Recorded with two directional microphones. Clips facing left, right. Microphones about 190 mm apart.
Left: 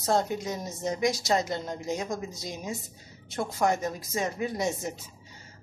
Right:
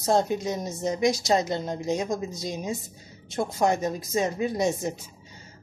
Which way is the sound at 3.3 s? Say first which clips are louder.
Right 3 dB; 20° right (ahead or behind).